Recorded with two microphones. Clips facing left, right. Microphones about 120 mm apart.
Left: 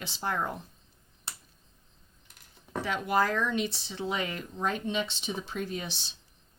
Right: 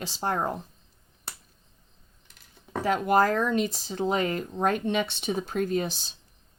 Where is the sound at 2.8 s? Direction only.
45° right (ahead or behind).